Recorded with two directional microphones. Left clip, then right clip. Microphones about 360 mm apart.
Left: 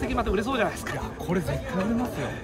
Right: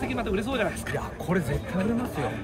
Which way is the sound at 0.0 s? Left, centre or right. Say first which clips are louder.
Left 2 dB; centre.